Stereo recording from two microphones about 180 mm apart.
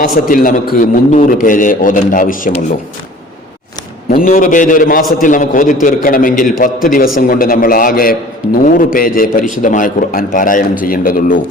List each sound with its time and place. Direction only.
0.0 s a man's voice: 50° left (ahead or behind)
4.1 s a man's voice: 50° left (ahead or behind)